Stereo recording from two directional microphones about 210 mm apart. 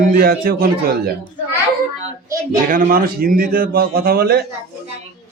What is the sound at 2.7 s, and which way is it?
Speech, 40° right (ahead or behind).